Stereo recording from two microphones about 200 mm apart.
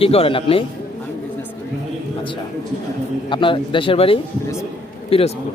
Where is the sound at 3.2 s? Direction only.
25° left (ahead or behind).